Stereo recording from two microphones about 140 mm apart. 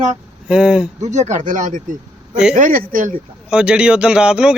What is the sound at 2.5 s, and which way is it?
Speech, 80° right.